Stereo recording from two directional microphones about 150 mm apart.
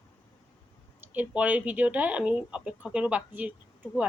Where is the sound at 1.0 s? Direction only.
10° right (ahead or behind).